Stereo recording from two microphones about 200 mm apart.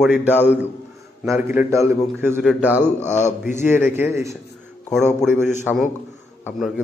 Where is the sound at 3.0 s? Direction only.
35° left (ahead or behind).